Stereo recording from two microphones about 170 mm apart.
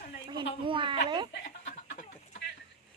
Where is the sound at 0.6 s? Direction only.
30° right (ahead or behind).